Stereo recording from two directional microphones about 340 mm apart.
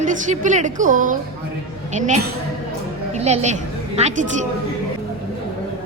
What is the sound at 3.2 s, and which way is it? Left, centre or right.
A woman's voice, centre.